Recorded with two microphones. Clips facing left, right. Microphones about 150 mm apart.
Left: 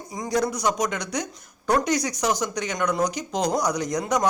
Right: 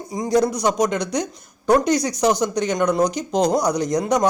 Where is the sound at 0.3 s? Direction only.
30° right (ahead or behind).